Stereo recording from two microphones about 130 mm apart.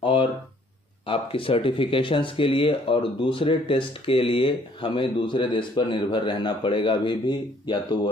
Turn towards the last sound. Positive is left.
turn(degrees=35)  # may be behind; listen again after turning